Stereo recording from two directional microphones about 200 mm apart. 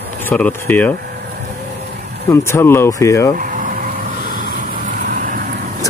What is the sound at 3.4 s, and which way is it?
Vehicle, 45° right (ahead or behind).